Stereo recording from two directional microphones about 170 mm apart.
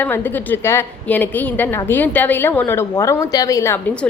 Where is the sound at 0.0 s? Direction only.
10° left (ahead or behind).